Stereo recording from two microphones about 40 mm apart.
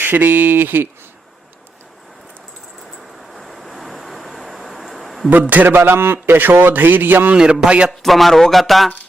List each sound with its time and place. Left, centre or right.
0.0 s a man's voice: right
3.3 s vehicle: centre
5.3 s a man's voice: right
5.6 s a man's voice: right
6.3 s a man's voice: right
7.3 s a man's voice: right
7.9 s speech: centre